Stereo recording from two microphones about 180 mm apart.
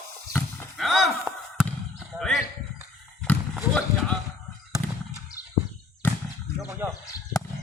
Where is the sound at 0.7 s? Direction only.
Centre (ahead or behind).